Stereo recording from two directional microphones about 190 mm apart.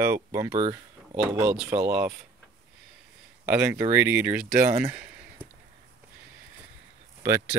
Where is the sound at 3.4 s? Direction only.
10° right (ahead or behind).